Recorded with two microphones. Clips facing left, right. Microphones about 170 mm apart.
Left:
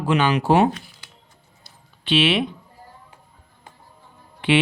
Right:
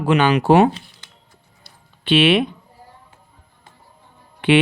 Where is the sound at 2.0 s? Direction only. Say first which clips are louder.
Right 4 dB; 55° right (ahead or behind).